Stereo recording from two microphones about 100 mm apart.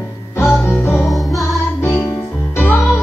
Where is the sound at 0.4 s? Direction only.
25° left (ahead or behind).